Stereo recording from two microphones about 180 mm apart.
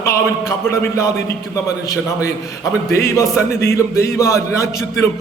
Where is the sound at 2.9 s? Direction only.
15° left (ahead or behind).